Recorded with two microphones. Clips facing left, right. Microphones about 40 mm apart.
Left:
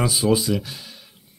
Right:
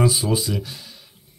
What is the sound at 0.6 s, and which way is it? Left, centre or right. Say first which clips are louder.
Speech: right 1 dB; left.